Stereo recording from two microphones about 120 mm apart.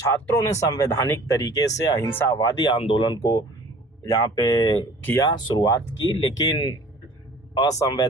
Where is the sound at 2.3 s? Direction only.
35° left (ahead or behind).